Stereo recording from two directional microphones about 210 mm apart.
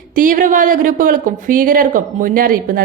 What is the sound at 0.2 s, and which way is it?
Speech, 40° right (ahead or behind).